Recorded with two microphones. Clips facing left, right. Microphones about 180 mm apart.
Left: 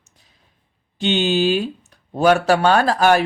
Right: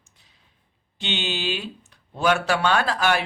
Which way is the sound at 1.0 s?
45° left (ahead or behind).